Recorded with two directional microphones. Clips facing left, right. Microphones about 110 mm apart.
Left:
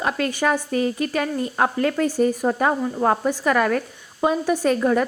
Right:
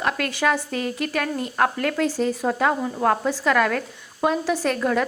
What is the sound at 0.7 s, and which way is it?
Speech, 75° right (ahead or behind).